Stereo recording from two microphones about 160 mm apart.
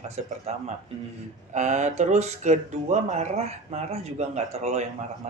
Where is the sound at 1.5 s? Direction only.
45° right (ahead or behind).